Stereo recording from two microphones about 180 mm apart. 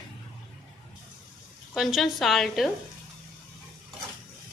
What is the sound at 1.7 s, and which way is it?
Speech, centre (ahead or behind).